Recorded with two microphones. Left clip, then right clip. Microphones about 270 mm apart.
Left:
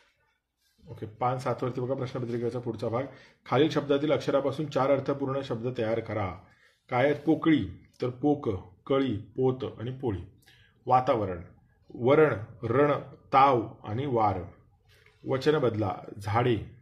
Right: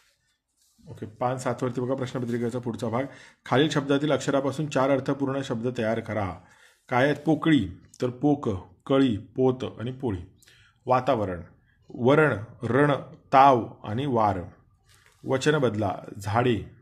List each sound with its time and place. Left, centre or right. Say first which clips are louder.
0.9 s speech: right 1 dB; right